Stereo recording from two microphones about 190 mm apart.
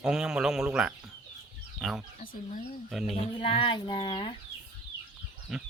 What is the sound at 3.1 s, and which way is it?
Speech, 30° left (ahead or behind).